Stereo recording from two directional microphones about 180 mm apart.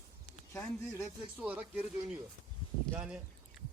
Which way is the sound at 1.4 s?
10° right (ahead or behind).